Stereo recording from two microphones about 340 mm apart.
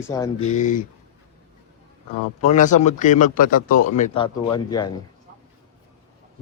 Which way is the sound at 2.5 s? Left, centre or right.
Left.